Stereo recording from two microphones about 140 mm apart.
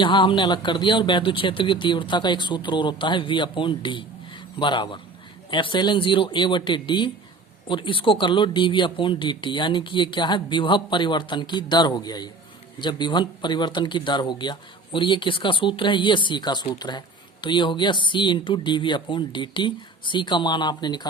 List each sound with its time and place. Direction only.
0.0 s speech: 35° left (ahead or behind)